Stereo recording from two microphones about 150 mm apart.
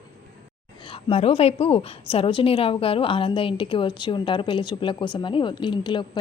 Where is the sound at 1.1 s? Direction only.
40° left (ahead or behind).